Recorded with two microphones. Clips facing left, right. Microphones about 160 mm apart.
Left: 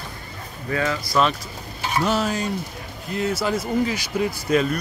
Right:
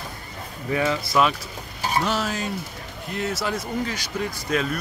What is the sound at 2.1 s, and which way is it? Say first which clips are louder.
Speech: left 3 dB; centre (ahead or behind).